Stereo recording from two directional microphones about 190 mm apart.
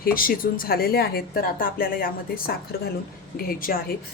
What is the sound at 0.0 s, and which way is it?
A woman's voice, 50° left (ahead or behind).